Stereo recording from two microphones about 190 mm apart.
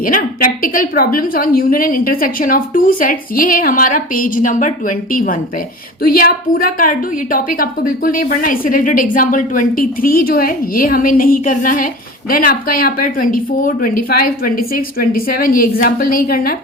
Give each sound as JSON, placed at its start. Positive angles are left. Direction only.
{"t": 0.0, "sound": "a woman's voice", "side_deg": 45}